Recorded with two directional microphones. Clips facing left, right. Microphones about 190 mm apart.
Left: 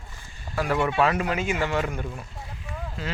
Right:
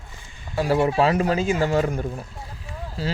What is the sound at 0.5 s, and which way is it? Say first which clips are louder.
Speech: right 4 dB; 30° right (ahead or behind).